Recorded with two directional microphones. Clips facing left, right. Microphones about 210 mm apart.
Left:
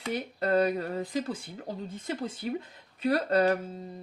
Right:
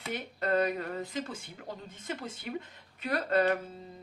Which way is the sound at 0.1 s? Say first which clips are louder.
Left 3 dB; 35° left (ahead or behind).